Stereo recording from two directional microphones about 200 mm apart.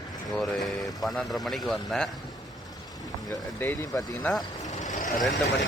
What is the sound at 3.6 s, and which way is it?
Speech, 10° left (ahead or behind).